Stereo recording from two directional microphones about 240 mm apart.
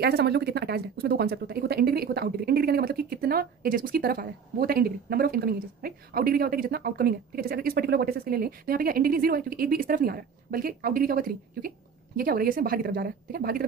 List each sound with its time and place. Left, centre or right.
0.0 s speech: right